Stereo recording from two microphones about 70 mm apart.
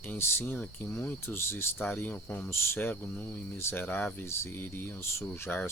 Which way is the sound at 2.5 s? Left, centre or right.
Left.